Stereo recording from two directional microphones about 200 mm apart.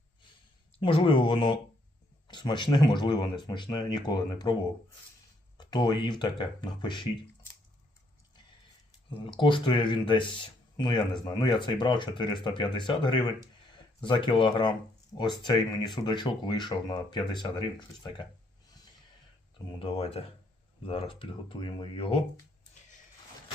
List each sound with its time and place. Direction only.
0.8 s speech: 25° left (ahead or behind)
5.5 s speech: 20° left (ahead or behind)
9.2 s speech: 25° left (ahead or behind)
19.8 s speech: 30° left (ahead or behind)